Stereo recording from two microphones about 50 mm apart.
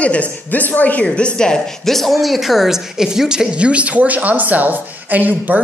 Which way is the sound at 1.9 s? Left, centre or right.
Centre.